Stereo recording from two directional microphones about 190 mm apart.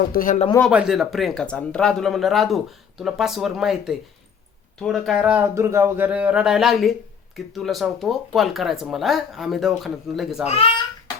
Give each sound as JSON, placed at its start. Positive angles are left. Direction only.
{"t": 0.1, "sound": "speech", "side_deg": 45}
{"t": 0.6, "sound": "speech", "side_deg": -5}
{"t": 10.4, "sound": "a child's voice", "side_deg": 35}